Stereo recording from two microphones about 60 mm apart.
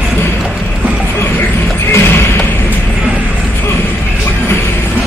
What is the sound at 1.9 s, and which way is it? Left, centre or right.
Music, left.